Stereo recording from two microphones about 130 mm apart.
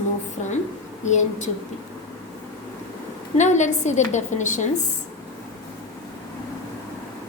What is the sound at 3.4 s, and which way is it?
A woman's voice, 65° left (ahead or behind).